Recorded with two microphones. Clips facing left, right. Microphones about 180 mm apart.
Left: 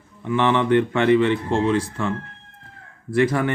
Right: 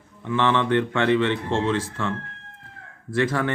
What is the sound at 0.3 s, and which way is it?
A man's voice, 15° left (ahead or behind).